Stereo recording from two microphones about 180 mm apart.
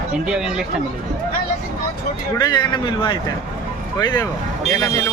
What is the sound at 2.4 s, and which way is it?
A man's voice, 25° left (ahead or behind).